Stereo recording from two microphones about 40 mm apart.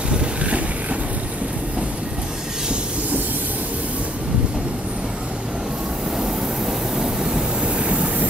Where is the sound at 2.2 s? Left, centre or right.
Centre.